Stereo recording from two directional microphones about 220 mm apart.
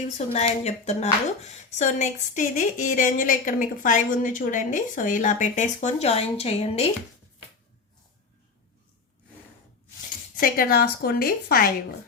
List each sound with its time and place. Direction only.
0.3 s speech: 30° left (ahead or behind)
10.4 s a woman's voice: 45° left (ahead or behind)